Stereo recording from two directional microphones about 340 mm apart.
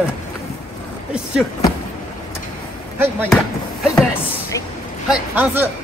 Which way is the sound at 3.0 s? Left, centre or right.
Centre.